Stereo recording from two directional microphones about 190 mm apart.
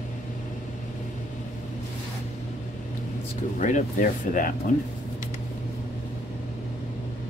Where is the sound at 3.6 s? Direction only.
40° left (ahead or behind).